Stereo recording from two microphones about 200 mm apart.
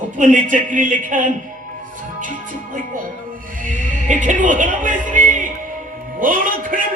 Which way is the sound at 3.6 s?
40° right (ahead or behind).